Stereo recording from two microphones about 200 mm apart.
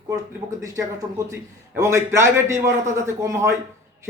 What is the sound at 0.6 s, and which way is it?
A man's voice, 15° right (ahead or behind).